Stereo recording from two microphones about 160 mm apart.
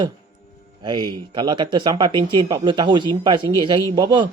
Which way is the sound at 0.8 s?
25° right (ahead or behind).